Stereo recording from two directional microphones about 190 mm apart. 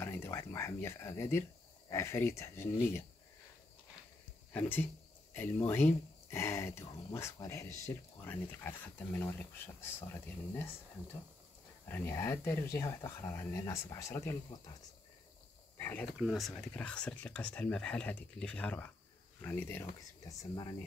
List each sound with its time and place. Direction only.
0.0 s speech: 10° left (ahead or behind)
4.5 s speech: 10° left (ahead or behind)
11.9 s speech: 15° left (ahead or behind)
15.8 s speech: 10° left (ahead or behind)